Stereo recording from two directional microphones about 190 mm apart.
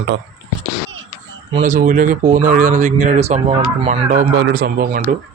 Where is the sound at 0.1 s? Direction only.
65° right (ahead or behind).